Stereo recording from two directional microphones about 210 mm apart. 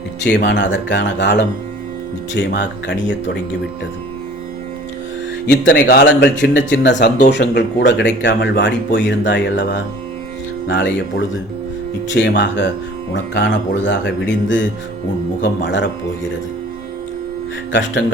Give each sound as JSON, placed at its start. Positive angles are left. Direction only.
{"t": 0.3, "sound": "speech", "side_deg": 55}
{"t": 5.5, "sound": "speech", "side_deg": 55}
{"t": 12.1, "sound": "speech", "side_deg": 55}
{"t": 17.7, "sound": "speech", "side_deg": 60}